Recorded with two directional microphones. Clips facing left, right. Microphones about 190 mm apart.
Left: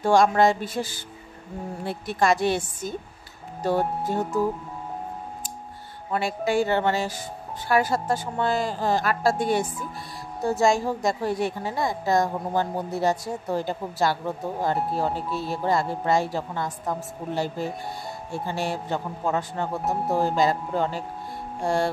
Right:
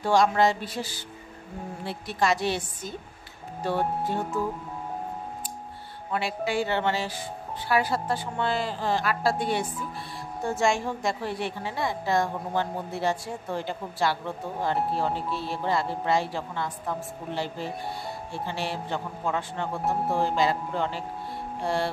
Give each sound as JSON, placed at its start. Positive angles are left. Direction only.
{"t": 0.0, "sound": "a woman's voice", "side_deg": 50}
{"t": 6.1, "sound": "a woman's voice", "side_deg": 45}